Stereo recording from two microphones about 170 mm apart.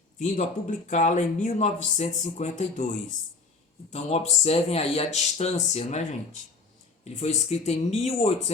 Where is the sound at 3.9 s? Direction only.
40° left (ahead or behind).